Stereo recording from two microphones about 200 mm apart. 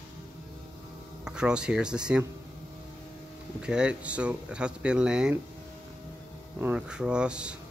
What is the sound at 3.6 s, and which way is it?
A man's voice, 5° right (ahead or behind).